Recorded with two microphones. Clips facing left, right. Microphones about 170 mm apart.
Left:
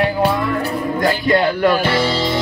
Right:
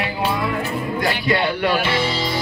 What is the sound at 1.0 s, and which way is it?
Speech, 40° left (ahead or behind).